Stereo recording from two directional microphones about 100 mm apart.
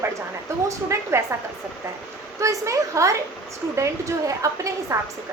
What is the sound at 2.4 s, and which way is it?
A woman's voice, 30° right (ahead or behind).